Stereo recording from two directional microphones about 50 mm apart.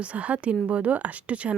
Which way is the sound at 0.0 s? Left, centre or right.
Right.